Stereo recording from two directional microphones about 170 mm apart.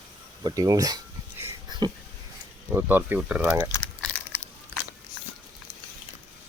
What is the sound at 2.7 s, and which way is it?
Speech, 10° right (ahead or behind).